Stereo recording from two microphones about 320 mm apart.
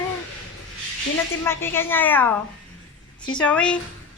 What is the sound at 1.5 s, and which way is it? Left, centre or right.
Speech, centre.